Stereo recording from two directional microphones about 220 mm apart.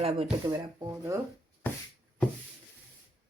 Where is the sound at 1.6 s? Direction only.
10° left (ahead or behind).